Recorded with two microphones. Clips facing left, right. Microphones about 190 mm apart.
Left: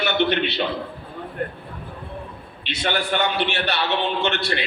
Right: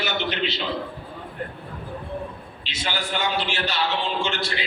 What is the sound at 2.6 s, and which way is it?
A man's voice, 60° left (ahead or behind).